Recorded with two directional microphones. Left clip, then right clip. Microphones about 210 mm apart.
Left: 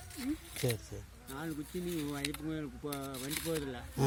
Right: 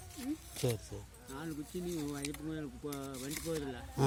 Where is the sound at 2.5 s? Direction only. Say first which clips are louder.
Left 2 dB; 25° left (ahead or behind).